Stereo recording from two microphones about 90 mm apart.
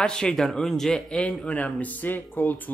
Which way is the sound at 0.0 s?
10° left (ahead or behind).